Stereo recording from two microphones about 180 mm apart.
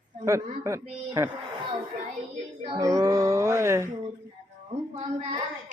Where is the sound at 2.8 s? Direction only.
20° right (ahead or behind).